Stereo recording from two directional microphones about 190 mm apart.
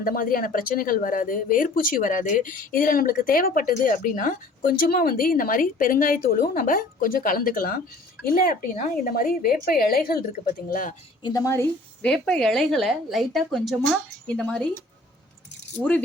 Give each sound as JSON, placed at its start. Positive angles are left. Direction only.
{"t": 0.0, "sound": "speech", "side_deg": 50}
{"t": 11.2, "sound": "a woman's voice", "side_deg": 20}